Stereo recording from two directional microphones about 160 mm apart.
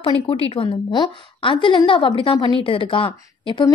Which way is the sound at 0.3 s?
35° left (ahead or behind).